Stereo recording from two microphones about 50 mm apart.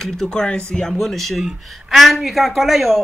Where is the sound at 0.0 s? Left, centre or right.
Centre.